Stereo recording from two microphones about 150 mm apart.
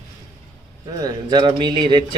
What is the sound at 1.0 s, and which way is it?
Speech, 30° right (ahead or behind).